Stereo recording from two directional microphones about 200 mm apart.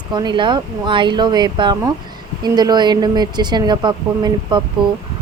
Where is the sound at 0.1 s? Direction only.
20° right (ahead or behind).